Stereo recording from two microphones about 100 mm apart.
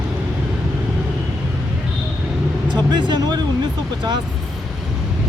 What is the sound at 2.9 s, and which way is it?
Speech, 45° right (ahead or behind).